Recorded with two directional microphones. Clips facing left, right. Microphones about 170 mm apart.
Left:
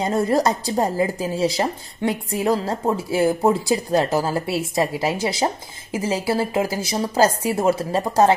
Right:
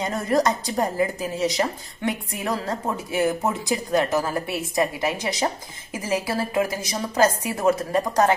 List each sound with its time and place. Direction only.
0.0 s a woman's voice: 30° left (ahead or behind)